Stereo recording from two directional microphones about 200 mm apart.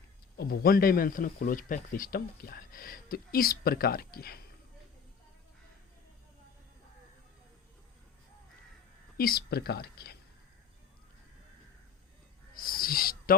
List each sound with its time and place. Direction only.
0.3 s speech: 50° left (ahead or behind)
9.1 s speech: 50° left (ahead or behind)
12.5 s a sound: 45° left (ahead or behind)